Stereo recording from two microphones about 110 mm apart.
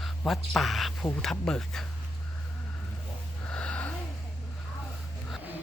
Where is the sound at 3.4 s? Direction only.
10° left (ahead or behind).